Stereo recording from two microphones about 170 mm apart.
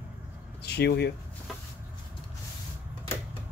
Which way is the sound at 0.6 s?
75° left (ahead or behind).